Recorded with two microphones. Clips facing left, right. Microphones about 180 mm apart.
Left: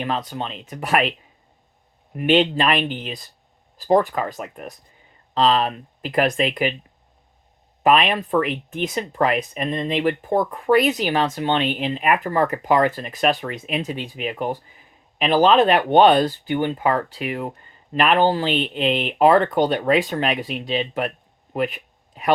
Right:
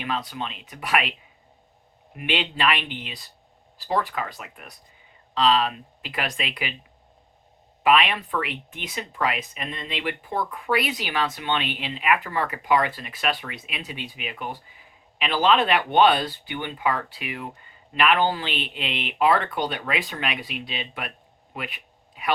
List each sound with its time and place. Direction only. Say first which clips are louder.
0.0 s speech: left 4 dB; 40° left (ahead or behind)
2.1 s speech: left 10 dB; 40° left (ahead or behind)
7.9 s speech: left 3 dB; 45° left (ahead or behind)
21.5 s a sound: left 12 dB; 40° left (ahead or behind)